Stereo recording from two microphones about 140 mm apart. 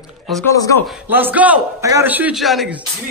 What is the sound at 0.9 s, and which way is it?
A man's voice, 10° right (ahead or behind).